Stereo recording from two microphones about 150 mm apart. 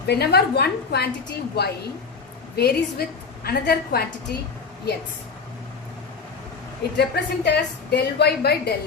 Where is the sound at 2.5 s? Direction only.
90° left.